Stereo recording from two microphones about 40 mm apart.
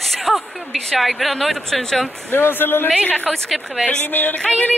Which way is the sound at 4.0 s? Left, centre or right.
Left.